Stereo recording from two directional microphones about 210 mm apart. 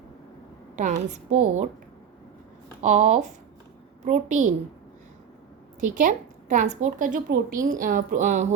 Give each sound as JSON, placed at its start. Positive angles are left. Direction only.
{"t": 0.8, "sound": "a woman's voice", "side_deg": -35}
{"t": 2.8, "sound": "a woman's voice", "side_deg": -35}
{"t": 5.8, "sound": "a woman's voice", "side_deg": -40}